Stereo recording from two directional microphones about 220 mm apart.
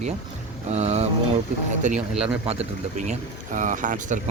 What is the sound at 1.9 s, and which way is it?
Speech, 5° right (ahead or behind).